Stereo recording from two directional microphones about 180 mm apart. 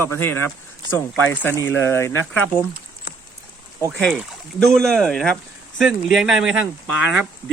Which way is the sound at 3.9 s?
Centre (ahead or behind).